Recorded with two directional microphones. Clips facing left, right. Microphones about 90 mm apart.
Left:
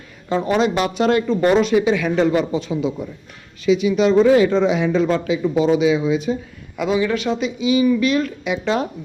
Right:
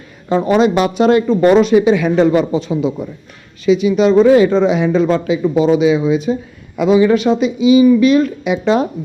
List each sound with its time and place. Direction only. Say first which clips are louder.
0.4 s speech: right 6 dB; 15° right (ahead or behind)
6.7 s a man's voice: right 8 dB; 10° right (ahead or behind)
7.0 s speech: right 8 dB; 20° right (ahead or behind)